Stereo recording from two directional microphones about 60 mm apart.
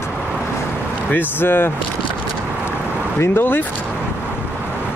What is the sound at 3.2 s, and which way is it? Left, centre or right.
Speech, left.